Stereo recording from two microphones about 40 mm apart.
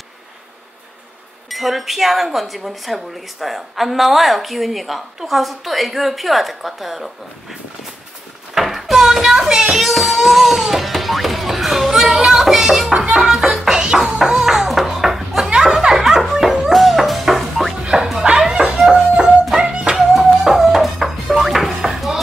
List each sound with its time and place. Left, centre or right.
1.5 s speech: centre
8.5 s a sound: centre
9.8 s music: centre
13.7 s a sound: right; by 15.5 s centre
15.5 s chuckle: centre
15.9 s music: centre
18.5 s music: right
19.5 s a sound: right
20.1 s music: centre